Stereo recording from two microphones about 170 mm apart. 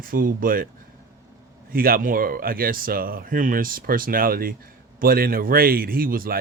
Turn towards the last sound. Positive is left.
turn(degrees=-60)  # may be behind; listen again after turning